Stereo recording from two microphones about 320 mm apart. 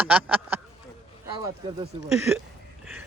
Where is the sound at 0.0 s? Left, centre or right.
Centre.